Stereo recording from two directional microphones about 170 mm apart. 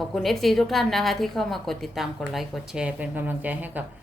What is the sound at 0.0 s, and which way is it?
A woman's voice, centre (ahead or behind).